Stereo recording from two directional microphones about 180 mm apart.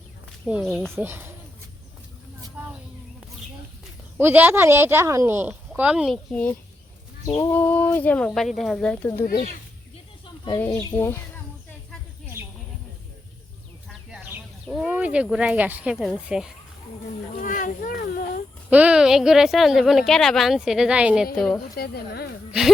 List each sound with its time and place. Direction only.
0.4 s a woman's voice: 5° right (ahead or behind)
0.9 s speech: 10° right (ahead or behind)
2.6 s a sound: 10° right (ahead or behind)
4.2 s speech: 10° right (ahead or behind)
6.3 s speech: 10° left (ahead or behind)
10.6 s speech: 15° left (ahead or behind)
14.1 s speech: 5° right (ahead or behind)
17.4 s a sound: 45° left (ahead or behind)
18.7 s a woman's voice: 5° right (ahead or behind)
21.8 s a woman's voice: 60° left (ahead or behind)